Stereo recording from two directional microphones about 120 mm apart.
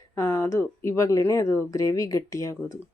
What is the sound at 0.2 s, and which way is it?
A woman's voice, 20° left (ahead or behind).